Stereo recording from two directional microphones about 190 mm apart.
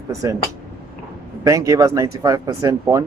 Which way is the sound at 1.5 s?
15° right (ahead or behind).